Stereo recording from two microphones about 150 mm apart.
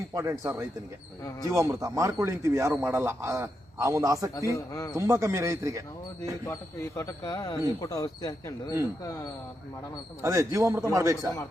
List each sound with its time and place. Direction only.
0.1 s speech: 20° right (ahead or behind)
4.4 s speech: 20° left (ahead or behind)
4.9 s speech: 20° right (ahead or behind)
6.5 s speech: 20° left (ahead or behind)
10.2 s speech: 20° right (ahead or behind)